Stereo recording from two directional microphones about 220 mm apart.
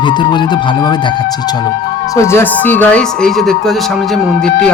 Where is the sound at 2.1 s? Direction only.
10° left (ahead or behind).